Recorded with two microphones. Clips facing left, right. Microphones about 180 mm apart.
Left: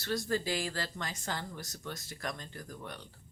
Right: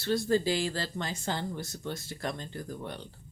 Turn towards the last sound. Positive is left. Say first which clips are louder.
# right 6 dB
turn(degrees=-30)  # may be behind; listen again after turning